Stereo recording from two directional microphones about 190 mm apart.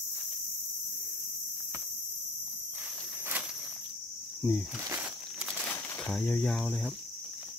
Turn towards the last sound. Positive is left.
turn(degrees=0)  # may be behind; listen again after turning